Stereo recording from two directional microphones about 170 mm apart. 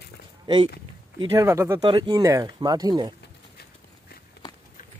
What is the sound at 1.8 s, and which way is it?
Speech, 30° right (ahead or behind).